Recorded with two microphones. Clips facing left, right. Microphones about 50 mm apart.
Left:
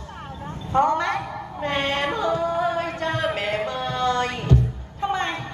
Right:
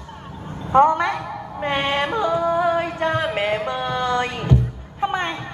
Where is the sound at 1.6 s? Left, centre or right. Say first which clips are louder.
Right 2 dB; right.